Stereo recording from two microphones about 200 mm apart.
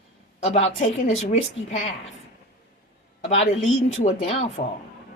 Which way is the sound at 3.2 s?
35° left (ahead or behind).